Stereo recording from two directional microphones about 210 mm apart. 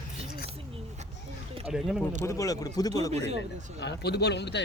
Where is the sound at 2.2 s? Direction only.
15° left (ahead or behind).